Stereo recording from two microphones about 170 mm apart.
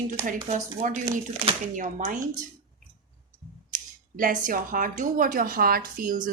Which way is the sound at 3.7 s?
50° right (ahead or behind).